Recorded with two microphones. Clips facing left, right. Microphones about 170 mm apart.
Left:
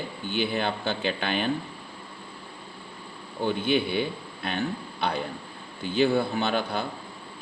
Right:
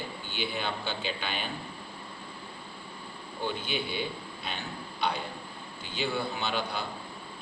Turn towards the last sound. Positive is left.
turn(degrees=55)  # may be behind; listen again after turning